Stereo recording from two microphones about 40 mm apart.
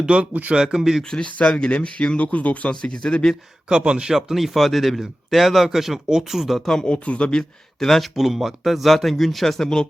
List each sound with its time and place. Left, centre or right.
0.1 s speech: right
0.5 s speech: centre
1.1 s speech: left
2.6 s speech: left
3.7 s speech: right
4.1 s speech: centre
6.8 s speech: left
7.9 s speech: centre